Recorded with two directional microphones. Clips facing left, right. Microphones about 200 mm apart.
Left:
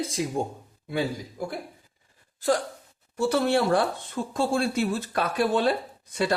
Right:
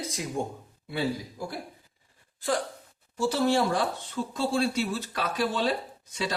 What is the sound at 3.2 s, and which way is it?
Speech, 60° left (ahead or behind).